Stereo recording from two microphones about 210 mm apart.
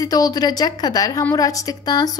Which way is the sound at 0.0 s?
15° left (ahead or behind).